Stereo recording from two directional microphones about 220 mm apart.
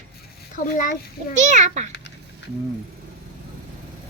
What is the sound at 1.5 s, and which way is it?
Speech, 35° right (ahead or behind).